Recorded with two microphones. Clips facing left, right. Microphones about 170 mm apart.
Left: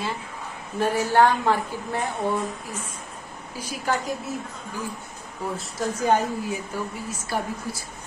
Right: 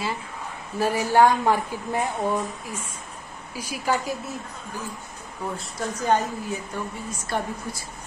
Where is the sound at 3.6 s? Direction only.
10° right (ahead or behind).